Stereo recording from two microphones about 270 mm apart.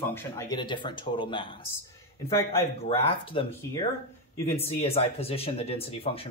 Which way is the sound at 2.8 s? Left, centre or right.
Left.